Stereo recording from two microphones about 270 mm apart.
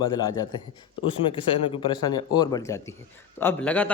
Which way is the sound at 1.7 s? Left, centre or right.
Centre.